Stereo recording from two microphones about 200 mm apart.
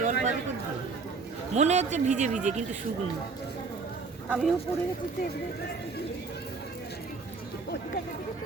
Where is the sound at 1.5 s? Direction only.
35° right (ahead or behind).